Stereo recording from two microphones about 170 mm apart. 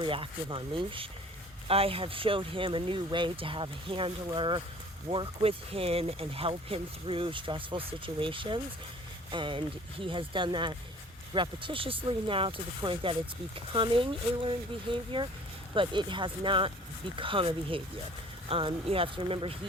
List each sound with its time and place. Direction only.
0.0 s speech: 30° right (ahead or behind)